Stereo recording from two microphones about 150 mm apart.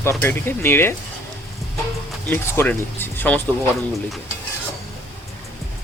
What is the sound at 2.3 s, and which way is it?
Speech, 10° left (ahead or behind).